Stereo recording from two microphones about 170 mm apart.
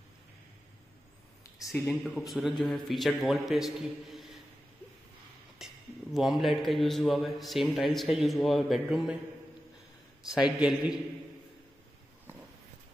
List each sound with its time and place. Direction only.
1.7 s a man's voice: 5° left (ahead or behind)
5.6 s a sound: 5° right (ahead or behind)
6.1 s a man's voice: centre (ahead or behind)
10.2 s a man's voice: 5° right (ahead or behind)